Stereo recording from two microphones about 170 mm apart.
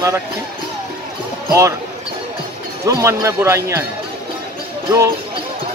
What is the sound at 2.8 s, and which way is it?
Speech, 20° right (ahead or behind).